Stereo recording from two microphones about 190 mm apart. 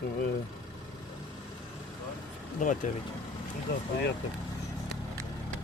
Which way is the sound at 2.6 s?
40° left (ahead or behind).